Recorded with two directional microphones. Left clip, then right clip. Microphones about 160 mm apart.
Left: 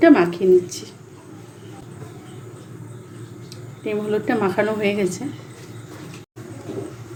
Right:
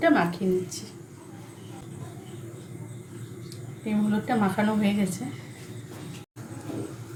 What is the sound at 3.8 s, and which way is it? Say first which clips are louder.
A woman's voice: left 6 dB; 50° left (ahead or behind).